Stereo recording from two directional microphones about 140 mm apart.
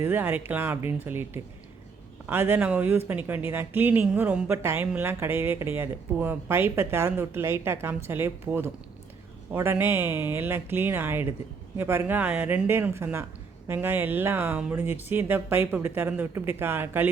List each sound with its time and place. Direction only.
0.0 s speech: 15° right (ahead or behind)